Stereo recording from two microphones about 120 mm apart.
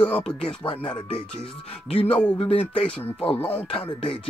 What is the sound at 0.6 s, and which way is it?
Speech, 45° left (ahead or behind).